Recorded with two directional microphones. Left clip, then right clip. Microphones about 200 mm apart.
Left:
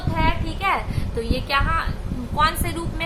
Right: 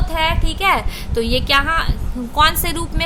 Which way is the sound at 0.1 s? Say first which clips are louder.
Right 5 dB; 45° right (ahead or behind).